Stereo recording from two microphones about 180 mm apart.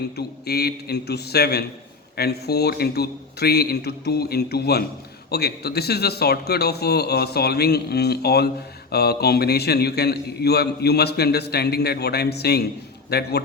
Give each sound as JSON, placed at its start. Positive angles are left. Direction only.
{"t": 0.2, "sound": "a man's voice", "side_deg": 60}